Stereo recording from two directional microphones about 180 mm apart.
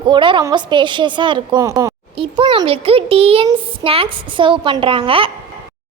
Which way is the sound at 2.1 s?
30° right (ahead or behind).